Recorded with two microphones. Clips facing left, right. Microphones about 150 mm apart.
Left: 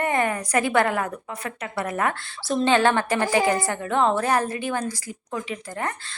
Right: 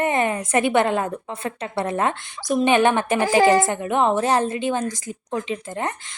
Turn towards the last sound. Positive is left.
turn(degrees=-20)  # may be behind; listen again after turning